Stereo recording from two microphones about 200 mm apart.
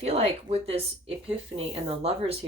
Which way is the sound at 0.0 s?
35° right (ahead or behind).